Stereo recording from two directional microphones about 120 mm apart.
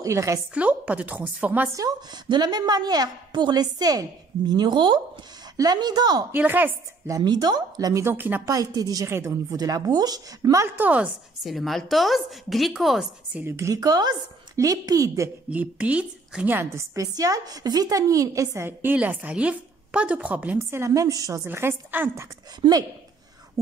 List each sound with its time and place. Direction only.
0.0 s a woman's voice: 25° right (ahead or behind)
0.6 s speech: 10° right (ahead or behind)
1.7 s a woman's voice: 30° right (ahead or behind)
6.3 s speech: 15° right (ahead or behind)
7.1 s a woman's voice: 30° right (ahead or behind)
8.0 s speech: 20° right (ahead or behind)
8.5 s a woman's voice: 30° right (ahead or behind)
10.8 s speech: 10° right (ahead or behind)
11.4 s a woman's voice: centre (ahead or behind)
13.4 s a woman's voice: 20° right (ahead or behind)
15.5 s a woman's voice: 10° right (ahead or behind); by 21.4 s 30° right (ahead or behind)
21.5 s speech: 20° right (ahead or behind)
22.6 s a woman's voice: 35° right (ahead or behind)